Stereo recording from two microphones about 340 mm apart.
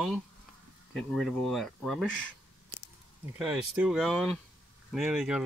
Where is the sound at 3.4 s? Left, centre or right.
Centre.